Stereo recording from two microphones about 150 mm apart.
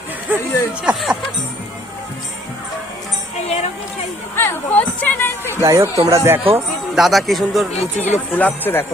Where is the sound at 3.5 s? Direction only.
45° left (ahead or behind).